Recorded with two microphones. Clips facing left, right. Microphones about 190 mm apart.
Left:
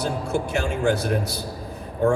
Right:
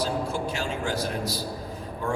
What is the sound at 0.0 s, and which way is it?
A man's voice, 60° left (ahead or behind).